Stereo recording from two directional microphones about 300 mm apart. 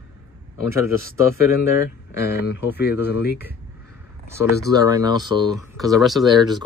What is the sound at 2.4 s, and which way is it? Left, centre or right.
Speech, left.